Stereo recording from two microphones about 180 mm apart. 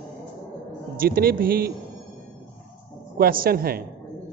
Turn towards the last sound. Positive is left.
turn(degrees=-55)  # may be behind; listen again after turning